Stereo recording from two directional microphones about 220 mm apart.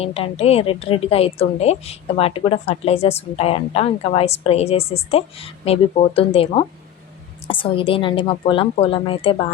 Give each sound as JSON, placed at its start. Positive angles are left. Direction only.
{"t": 0.0, "sound": "a woman's voice", "side_deg": 25}